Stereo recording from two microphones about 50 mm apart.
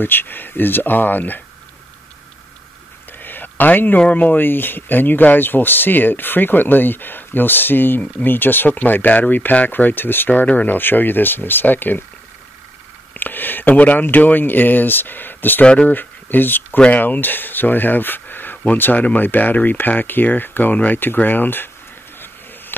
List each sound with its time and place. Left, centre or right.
0.0 s speech: left
3.1 s a sound: left
4.0 s speech: left
10.4 s speech: left
10.7 s speech: left
13.1 s speech: left
15.6 s speech: left
15.9 s speech: left
16.7 s speech: left